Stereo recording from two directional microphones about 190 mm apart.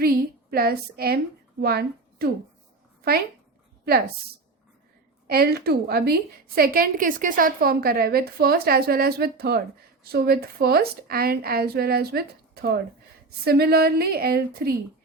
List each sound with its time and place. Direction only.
0.0 s a woman's voice: 55° right (ahead or behind)
5.3 s a woman's voice: 55° right (ahead or behind)